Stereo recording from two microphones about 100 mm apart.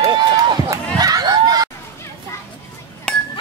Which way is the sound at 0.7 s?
40° right (ahead or behind).